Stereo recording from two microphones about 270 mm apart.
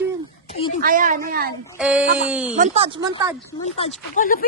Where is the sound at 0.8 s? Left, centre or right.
Right.